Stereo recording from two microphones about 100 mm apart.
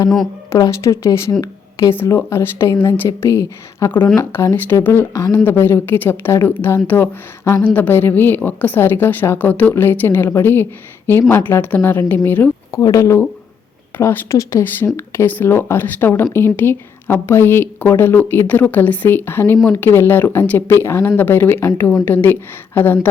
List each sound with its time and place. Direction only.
0.6 s speech: 30° left (ahead or behind)